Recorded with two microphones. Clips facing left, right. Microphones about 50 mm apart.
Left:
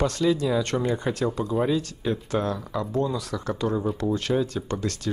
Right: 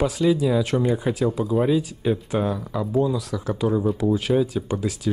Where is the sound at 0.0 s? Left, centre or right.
Centre.